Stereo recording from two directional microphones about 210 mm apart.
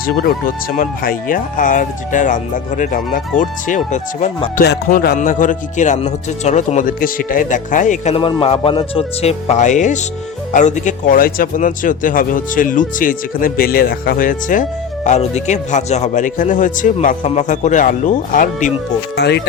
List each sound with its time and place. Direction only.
0.0 s speech: 45° left (ahead or behind)
4.6 s speech: 45° left (ahead or behind)
19.1 s speech: 55° left (ahead or behind)